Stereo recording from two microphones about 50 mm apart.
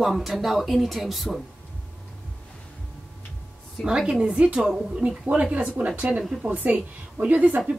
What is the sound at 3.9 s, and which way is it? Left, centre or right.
A woman's voice, centre.